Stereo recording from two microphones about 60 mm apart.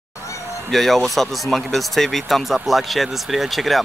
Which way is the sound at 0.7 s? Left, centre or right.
Centre.